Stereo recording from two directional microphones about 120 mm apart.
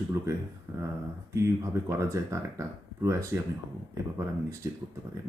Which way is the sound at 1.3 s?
25° right (ahead or behind).